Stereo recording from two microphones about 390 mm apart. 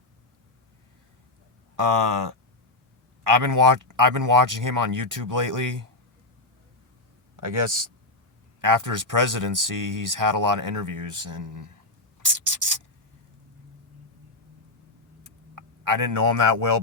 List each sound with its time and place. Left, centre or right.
1.7 s speech: right
7.4 s speech: right
12.3 s a sound: right
15.5 s speech: right